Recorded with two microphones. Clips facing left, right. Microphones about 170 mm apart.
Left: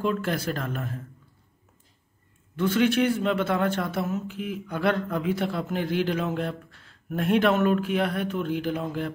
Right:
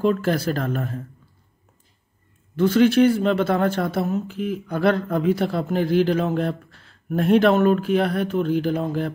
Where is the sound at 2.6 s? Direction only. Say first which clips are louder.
Right 6 dB; 35° right (ahead or behind).